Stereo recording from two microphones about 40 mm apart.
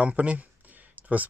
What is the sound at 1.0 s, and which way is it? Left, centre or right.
Clicking, right.